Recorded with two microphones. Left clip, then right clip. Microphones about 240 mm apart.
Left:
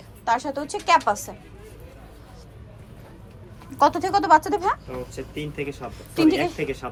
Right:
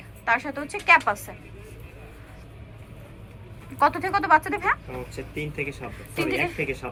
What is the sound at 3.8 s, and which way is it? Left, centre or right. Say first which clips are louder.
Speech: left 3 dB; centre.